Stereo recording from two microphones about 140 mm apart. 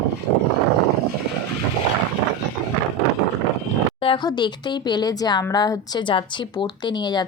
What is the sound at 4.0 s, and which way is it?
A woman's voice, 35° left (ahead or behind).